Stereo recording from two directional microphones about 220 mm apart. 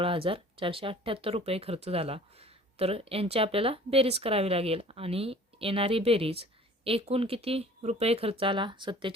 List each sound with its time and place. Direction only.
0.0 s speech: 25° right (ahead or behind)